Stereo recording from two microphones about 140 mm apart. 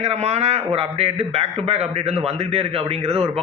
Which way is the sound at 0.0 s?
50° right (ahead or behind).